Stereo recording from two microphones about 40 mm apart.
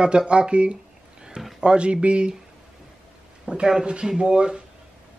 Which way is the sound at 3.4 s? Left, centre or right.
Centre.